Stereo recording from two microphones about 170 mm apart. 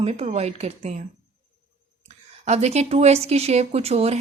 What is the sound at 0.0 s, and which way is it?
Speech, 40° right (ahead or behind).